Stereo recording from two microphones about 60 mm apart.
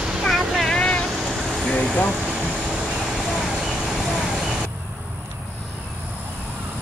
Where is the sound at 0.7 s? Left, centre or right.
Centre.